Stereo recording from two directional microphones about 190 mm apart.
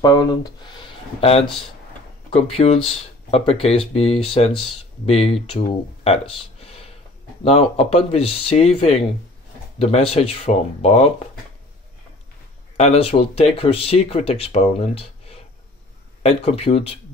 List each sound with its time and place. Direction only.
0.0 s speech: 20° left (ahead or behind)
6.6 s a sound: 30° left (ahead or behind)
7.4 s speech: 35° left (ahead or behind)
12.7 s speech: 35° left (ahead or behind)